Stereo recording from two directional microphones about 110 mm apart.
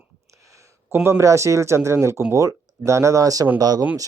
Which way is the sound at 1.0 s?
30° right (ahead or behind).